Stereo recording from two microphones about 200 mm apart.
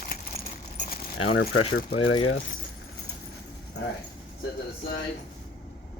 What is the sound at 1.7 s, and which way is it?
Speech, 55° left (ahead or behind).